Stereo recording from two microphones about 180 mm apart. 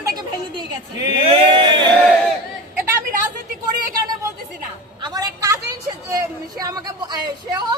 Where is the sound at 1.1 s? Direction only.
25° right (ahead or behind).